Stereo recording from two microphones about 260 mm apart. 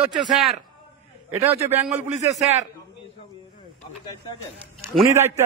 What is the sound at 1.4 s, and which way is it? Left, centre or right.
Speech, right.